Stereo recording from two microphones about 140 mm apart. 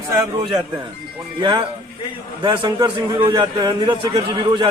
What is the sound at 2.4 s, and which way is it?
A man's voice, 35° right (ahead or behind).